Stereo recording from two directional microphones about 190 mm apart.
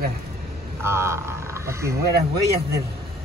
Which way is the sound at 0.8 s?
15° right (ahead or behind).